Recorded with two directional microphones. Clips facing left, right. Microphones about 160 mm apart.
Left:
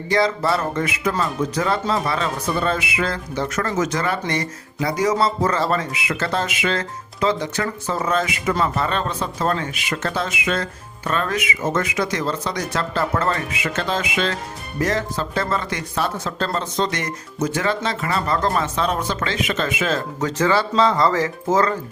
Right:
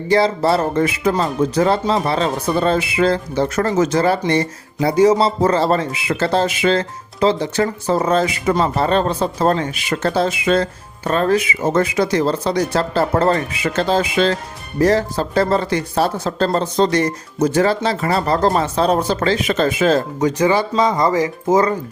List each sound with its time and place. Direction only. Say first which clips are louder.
0.1 s speech: right 4 dB; 30° right (ahead or behind)
20.1 s speech: right 4 dB; 15° right (ahead or behind)